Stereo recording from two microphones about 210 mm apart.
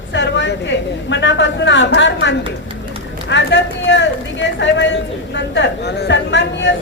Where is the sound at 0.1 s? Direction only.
55° left (ahead or behind).